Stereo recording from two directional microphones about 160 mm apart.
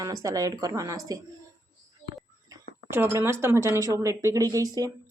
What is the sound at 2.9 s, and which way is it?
Speech, 15° right (ahead or behind).